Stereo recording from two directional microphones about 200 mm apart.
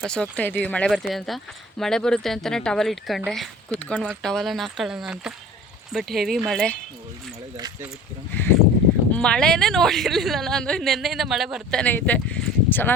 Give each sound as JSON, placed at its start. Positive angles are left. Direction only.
{"t": 0.0, "sound": "a woman's voice", "side_deg": 5}
{"t": 7.5, "sound": "a sound", "side_deg": -20}
{"t": 9.1, "sound": "a woman's voice", "side_deg": 5}